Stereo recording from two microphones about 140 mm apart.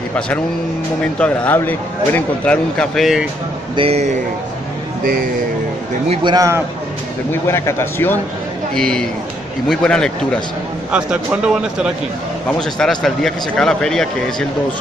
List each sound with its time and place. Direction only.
1.2 s speech: 10° left (ahead or behind)
3.7 s speech: 45° right (ahead or behind)
6.3 s a man's voice: 20° right (ahead or behind)
7.4 s speech: 20° left (ahead or behind)
8.7 s a man's voice: 5° left (ahead or behind)
10.9 s a man's voice: 5° right (ahead or behind)